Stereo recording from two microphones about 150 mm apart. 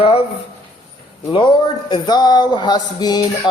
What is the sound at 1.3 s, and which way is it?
A man's voice, 30° left (ahead or behind).